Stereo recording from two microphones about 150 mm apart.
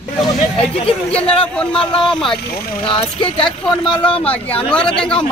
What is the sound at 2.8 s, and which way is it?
Speech, 35° left (ahead or behind).